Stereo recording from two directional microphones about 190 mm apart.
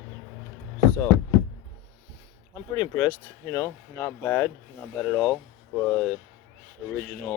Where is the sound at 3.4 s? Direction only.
15° left (ahead or behind).